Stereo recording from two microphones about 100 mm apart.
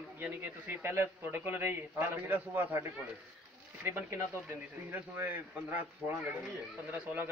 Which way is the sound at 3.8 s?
30° right (ahead or behind).